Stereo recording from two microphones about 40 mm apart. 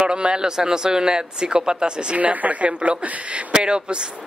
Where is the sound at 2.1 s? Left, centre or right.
Right.